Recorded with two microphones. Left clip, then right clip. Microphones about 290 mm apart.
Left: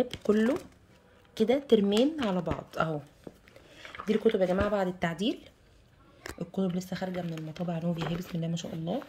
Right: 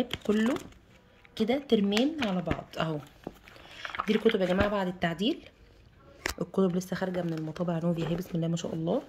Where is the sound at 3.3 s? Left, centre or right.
Right.